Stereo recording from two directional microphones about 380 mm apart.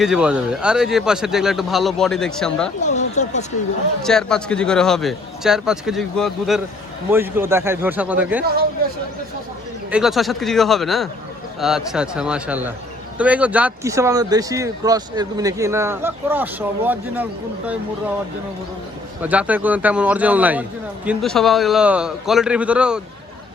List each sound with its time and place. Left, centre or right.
0.0 s speech: centre
2.8 s speech: centre
4.0 s speech: centre
9.9 s speech: centre
19.2 s speech: centre